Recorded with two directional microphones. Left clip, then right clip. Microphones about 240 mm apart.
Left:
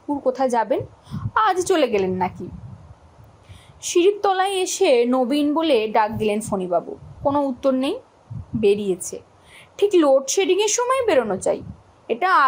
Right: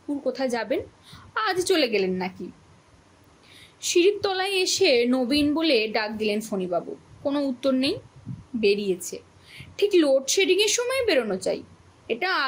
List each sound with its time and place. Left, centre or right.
0.3 s a woman's voice: centre
3.8 s a woman's voice: centre